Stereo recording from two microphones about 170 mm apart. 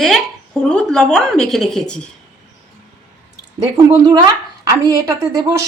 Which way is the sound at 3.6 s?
20° right (ahead or behind).